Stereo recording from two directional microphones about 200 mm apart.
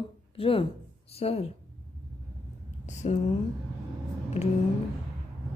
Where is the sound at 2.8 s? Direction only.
35° left (ahead or behind).